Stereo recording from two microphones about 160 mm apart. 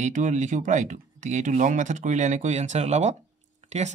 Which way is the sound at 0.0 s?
50° right (ahead or behind).